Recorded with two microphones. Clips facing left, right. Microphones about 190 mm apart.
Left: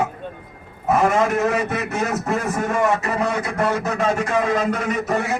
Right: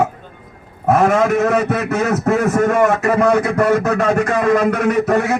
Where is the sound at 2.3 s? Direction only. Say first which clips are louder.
Right 8 dB; 65° right (ahead or behind).